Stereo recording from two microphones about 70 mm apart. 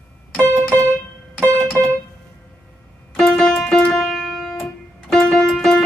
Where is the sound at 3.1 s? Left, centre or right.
Centre.